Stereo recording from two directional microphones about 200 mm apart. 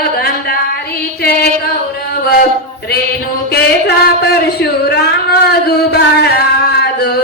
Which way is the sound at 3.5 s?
55° left (ahead or behind).